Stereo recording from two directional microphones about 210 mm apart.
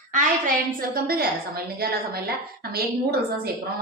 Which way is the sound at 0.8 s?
45° right (ahead or behind).